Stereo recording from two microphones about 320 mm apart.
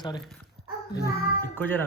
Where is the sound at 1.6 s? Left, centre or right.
Centre.